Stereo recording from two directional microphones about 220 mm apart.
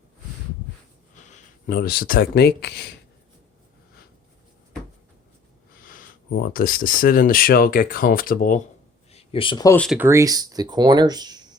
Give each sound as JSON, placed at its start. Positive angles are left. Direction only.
{"t": 1.3, "sound": "speech", "side_deg": 40}
{"t": 5.9, "sound": "speech", "side_deg": 40}
{"t": 9.1, "sound": "speech", "side_deg": 25}
{"t": 9.7, "sound": "speech", "side_deg": 5}
{"t": 10.0, "sound": "speech", "side_deg": -15}